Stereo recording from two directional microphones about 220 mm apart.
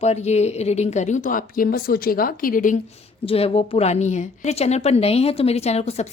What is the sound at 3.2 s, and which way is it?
A woman's voice, 25° left (ahead or behind).